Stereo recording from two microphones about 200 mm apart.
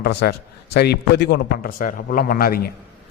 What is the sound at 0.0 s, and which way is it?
A man's voice, 55° left (ahead or behind).